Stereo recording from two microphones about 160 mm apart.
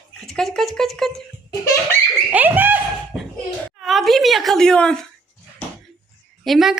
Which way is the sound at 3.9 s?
Centre (ahead or behind).